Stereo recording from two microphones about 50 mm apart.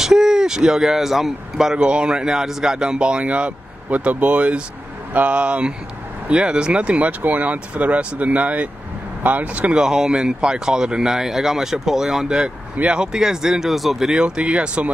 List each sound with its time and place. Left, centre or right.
0.0 s speech: centre
1.8 s speech: centre
9.8 s speech: centre